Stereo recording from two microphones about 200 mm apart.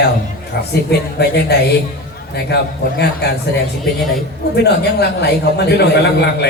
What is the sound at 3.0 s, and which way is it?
A man's voice, 55° left (ahead or behind).